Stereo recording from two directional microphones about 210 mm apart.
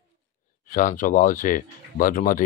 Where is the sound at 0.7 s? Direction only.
40° left (ahead or behind).